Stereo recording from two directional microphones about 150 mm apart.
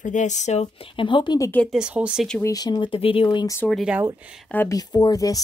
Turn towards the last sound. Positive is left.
turn(degrees=25)  # may be behind; listen again after turning